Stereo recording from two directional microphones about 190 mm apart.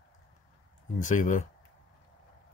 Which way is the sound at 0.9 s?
40° left (ahead or behind).